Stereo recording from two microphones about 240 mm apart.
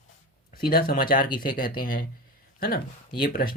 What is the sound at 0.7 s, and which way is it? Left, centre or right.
Speech, left.